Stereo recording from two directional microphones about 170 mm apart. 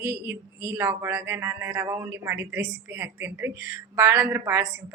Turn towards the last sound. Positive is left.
turn(degrees=-15)  # may be behind; listen again after turning